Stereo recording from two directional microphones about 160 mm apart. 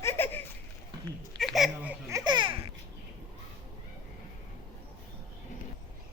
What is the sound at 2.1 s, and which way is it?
Babbling, 25° right (ahead or behind).